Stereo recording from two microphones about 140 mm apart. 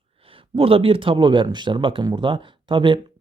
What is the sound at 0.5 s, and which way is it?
Speech, 40° right (ahead or behind).